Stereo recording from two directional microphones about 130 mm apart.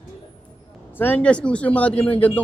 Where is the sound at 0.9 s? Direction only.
15° left (ahead or behind).